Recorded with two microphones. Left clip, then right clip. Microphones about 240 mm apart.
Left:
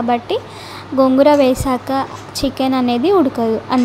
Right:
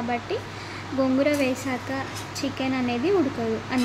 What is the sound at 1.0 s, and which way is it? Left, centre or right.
A woman's voice, left.